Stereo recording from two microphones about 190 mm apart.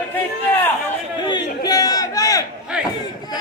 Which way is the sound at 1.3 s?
20° left (ahead or behind).